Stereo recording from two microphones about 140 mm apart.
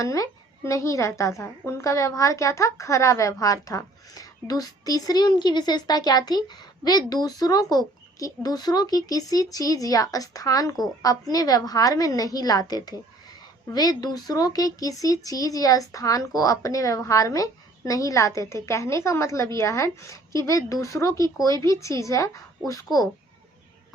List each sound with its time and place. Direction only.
0.0 s speech: 20° left (ahead or behind)